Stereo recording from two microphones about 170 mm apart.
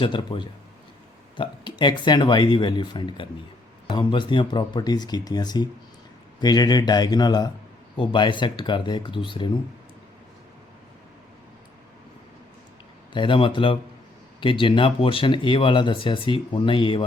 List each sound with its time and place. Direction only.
0.0 s speech: 25° left (ahead or behind)
13.1 s speech: 30° left (ahead or behind)